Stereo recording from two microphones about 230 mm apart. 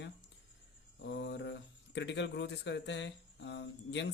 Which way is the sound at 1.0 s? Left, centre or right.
Left.